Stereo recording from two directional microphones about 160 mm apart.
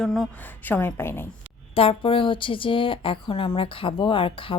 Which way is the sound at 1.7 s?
35° left (ahead or behind).